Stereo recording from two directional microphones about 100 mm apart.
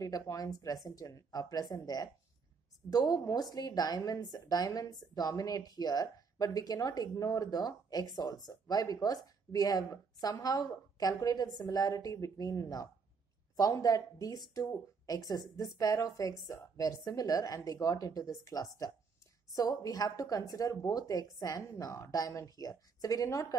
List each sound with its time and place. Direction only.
0.0 s a woman's voice: 35° left (ahead or behind)